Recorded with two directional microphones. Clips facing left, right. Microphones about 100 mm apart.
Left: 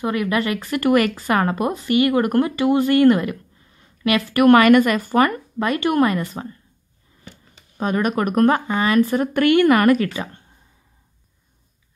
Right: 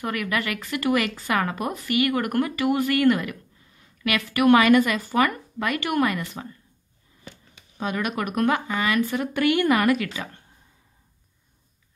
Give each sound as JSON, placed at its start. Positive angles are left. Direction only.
{"t": 0.0, "sound": "speech", "side_deg": 25}
{"t": 7.7, "sound": "speech", "side_deg": 40}
{"t": 10.1, "sound": "speech", "side_deg": 30}